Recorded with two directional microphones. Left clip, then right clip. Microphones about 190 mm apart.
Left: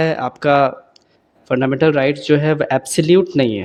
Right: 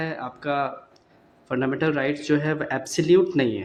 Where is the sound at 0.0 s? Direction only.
50° left (ahead or behind).